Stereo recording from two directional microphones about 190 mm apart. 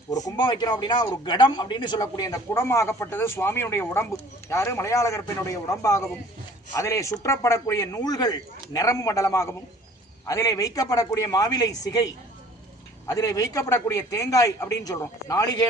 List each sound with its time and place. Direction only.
0.3 s a man's voice: 20° left (ahead or behind)
13.1 s a man's voice: 15° left (ahead or behind)